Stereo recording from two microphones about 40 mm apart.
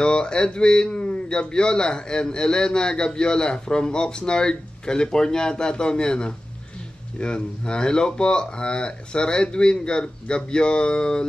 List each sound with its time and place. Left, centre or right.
0.0 s speech: left